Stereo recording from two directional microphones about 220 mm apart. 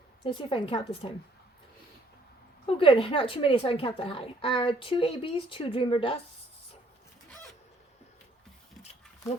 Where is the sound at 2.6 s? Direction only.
25° left (ahead or behind).